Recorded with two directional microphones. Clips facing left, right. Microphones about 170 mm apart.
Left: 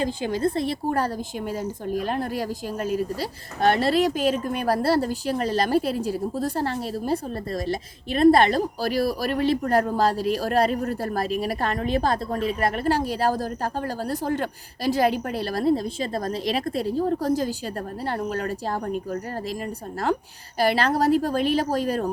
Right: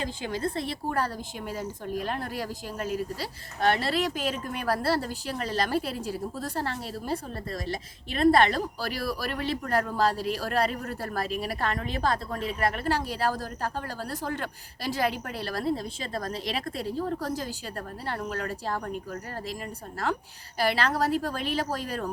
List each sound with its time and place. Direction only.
0.0 s a woman's voice: 40° left (ahead or behind)
20.6 s a woman's voice: 40° left (ahead or behind)